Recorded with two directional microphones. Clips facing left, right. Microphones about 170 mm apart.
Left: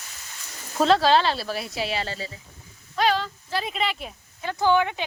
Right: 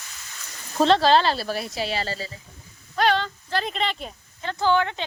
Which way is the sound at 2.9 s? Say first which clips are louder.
Right 1 dB; centre (ahead or behind).